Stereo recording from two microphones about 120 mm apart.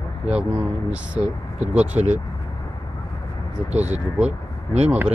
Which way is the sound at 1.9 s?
70° right (ahead or behind).